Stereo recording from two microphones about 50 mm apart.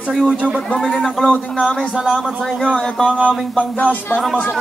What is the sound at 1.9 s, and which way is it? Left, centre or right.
Speech, centre.